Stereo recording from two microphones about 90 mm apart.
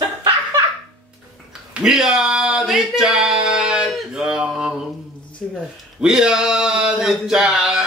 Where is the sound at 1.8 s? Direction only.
5° right (ahead or behind).